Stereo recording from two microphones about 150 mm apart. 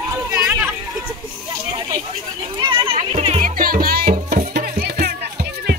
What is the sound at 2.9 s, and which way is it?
Music, 40° right (ahead or behind).